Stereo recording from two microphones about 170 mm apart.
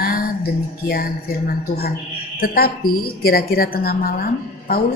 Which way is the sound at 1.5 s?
65° left (ahead or behind).